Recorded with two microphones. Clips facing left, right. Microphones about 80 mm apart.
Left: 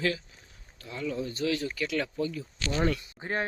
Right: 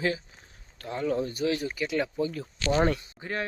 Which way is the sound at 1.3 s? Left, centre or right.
Right.